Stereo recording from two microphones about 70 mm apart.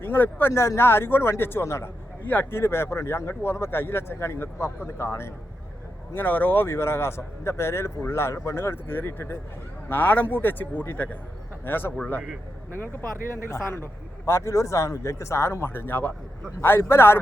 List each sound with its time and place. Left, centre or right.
0.0 s speech: left
2.2 s speech: left
2.5 s a man's voice: left